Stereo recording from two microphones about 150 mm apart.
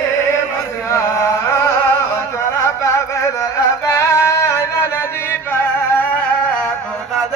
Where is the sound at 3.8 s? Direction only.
20° left (ahead or behind).